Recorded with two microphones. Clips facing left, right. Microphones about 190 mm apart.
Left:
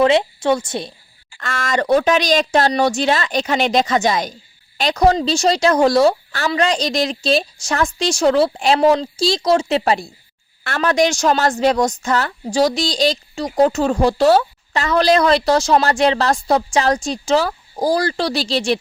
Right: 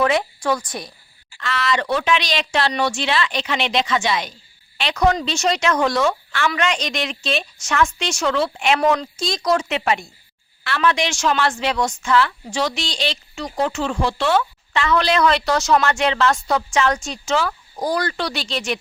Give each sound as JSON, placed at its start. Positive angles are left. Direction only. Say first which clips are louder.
{"t": 0.0, "sound": "a woman's voice", "louder": "left 5 dB", "side_deg": 25}
{"t": 1.4, "sound": "a woman's voice", "louder": "left 1 dB", "side_deg": 45}